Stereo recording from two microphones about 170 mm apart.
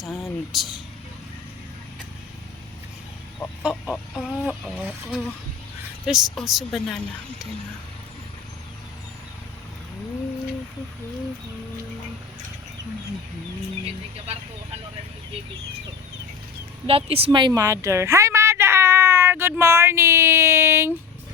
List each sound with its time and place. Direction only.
0.5 s speech: centre (ahead or behind)
3.6 s chicken: 5° right (ahead or behind)
4.2 s speech: 5° left (ahead or behind)
16.8 s a woman's voice: 35° right (ahead or behind); by 20.9 s 15° right (ahead or behind)